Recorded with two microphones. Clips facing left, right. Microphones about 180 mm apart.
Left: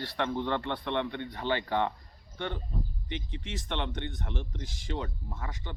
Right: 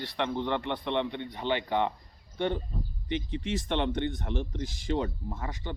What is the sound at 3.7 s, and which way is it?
Speech, 35° right (ahead or behind).